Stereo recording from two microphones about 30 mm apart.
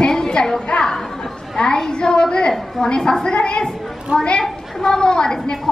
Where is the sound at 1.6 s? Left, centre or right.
Left.